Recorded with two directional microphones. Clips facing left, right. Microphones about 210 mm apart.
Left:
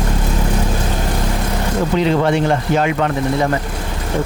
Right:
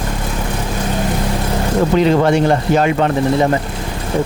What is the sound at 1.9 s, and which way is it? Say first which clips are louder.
Speech: right 2 dB; 45° right (ahead or behind).